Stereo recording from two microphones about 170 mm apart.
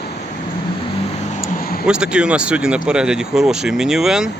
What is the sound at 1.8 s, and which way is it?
Speech, 5° right (ahead or behind).